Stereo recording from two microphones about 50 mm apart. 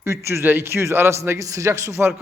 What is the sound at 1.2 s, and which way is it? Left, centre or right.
Speech, right.